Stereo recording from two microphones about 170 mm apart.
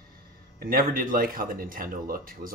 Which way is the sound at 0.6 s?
55° right (ahead or behind).